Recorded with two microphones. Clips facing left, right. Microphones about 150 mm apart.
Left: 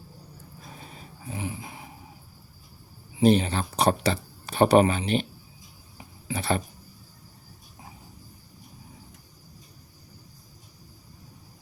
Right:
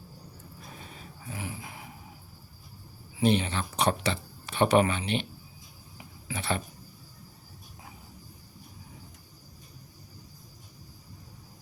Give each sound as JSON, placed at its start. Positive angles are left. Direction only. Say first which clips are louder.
{"t": 0.8, "sound": "a sound", "louder": "left 1 dB", "side_deg": 35}
{"t": 3.2, "sound": "speech", "louder": "left 5 dB", "side_deg": 40}
{"t": 6.2, "sound": "speech", "louder": "left 5 dB", "side_deg": 40}